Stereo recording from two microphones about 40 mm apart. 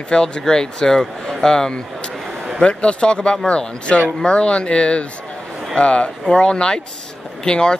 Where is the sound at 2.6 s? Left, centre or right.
Left.